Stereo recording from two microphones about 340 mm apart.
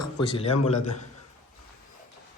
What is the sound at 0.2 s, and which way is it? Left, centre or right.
Speech, centre.